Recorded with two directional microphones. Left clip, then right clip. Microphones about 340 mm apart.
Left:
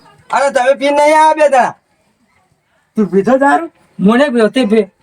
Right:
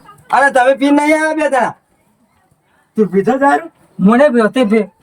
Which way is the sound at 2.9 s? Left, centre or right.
Centre.